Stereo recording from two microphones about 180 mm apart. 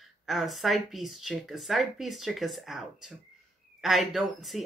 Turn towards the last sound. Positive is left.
turn(degrees=0)  # may be behind; listen again after turning